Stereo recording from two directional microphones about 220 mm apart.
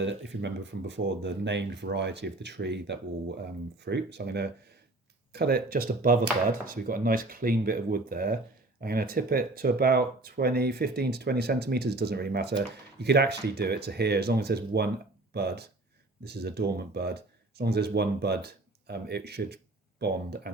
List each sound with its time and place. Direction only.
0.0 s speech: 55° right (ahead or behind)